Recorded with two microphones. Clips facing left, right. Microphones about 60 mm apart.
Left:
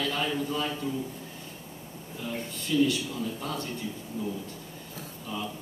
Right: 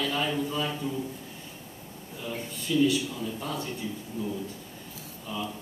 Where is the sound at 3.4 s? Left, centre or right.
Centre.